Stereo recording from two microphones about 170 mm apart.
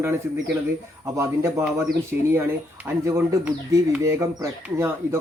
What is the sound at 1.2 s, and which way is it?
Speech, 15° right (ahead or behind).